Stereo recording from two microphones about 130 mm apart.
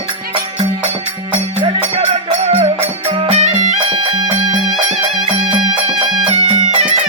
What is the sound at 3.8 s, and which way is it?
Music, 45° right (ahead or behind).